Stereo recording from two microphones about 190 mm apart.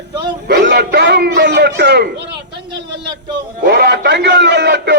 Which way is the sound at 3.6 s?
60° right (ahead or behind).